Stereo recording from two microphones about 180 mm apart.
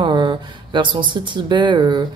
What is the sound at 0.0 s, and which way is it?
Speech, 25° right (ahead or behind).